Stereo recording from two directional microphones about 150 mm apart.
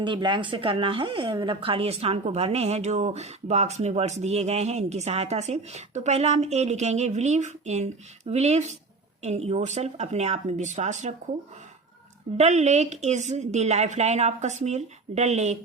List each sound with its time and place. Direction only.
0.0 s speech: 30° right (ahead or behind); by 11.1 s 50° right (ahead or behind)
12.4 s speech: 50° right (ahead or behind)